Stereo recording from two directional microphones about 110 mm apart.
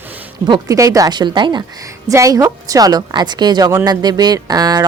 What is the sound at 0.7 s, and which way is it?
Speech, 30° right (ahead or behind).